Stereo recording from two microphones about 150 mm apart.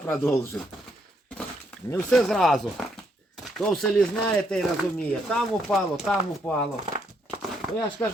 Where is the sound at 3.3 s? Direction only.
Centre (ahead or behind).